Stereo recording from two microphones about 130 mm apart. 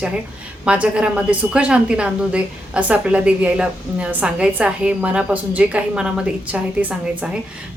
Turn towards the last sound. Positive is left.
turn(degrees=-10)  # may be behind; listen again after turning